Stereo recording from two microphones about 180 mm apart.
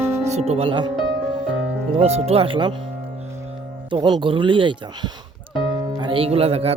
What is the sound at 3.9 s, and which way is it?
Speech, 25° right (ahead or behind).